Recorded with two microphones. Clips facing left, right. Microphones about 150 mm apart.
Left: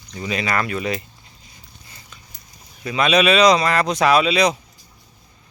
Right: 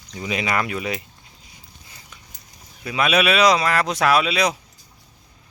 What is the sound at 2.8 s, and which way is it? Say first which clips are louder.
Speech: left 3 dB; 5° right (ahead or behind).